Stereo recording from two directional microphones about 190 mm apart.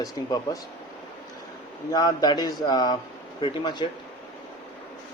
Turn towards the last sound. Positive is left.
turn(degrees=25)  # may be behind; listen again after turning